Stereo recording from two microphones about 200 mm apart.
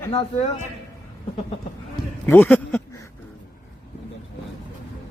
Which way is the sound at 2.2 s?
10° left (ahead or behind).